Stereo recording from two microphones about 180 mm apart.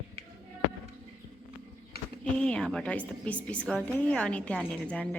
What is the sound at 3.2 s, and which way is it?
A woman's voice, 5° left (ahead or behind).